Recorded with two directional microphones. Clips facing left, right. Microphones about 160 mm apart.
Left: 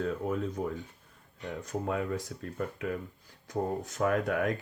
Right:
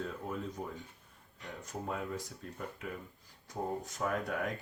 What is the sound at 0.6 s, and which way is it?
Speech, 90° left.